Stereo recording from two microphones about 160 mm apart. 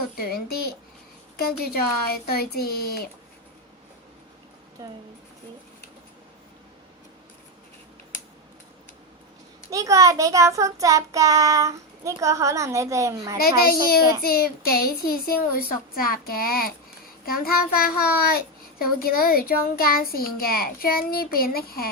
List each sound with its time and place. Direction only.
0.2 s a child's voice: 70° left (ahead or behind)
4.8 s a child's voice: 20° right (ahead or behind)
9.6 s a child's voice: 20° right (ahead or behind)
13.4 s a child's voice: 70° left (ahead or behind)